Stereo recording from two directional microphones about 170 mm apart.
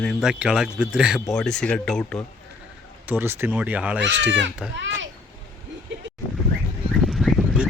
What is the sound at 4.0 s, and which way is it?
Speech, 90° right.